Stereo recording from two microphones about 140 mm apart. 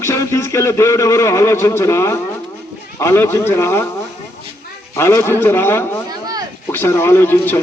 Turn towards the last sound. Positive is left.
turn(degrees=15)  # may be behind; listen again after turning